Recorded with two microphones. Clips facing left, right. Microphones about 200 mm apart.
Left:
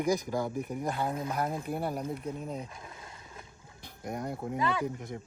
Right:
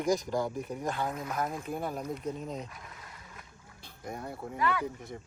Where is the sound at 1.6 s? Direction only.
10° left (ahead or behind).